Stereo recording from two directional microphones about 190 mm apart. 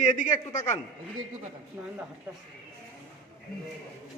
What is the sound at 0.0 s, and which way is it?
Speech, 40° left (ahead or behind).